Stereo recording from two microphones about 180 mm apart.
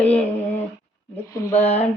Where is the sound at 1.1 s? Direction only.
15° left (ahead or behind).